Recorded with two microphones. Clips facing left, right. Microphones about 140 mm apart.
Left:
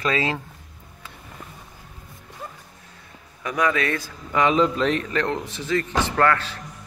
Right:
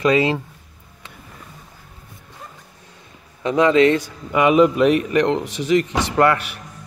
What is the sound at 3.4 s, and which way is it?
Speech, 25° right (ahead or behind).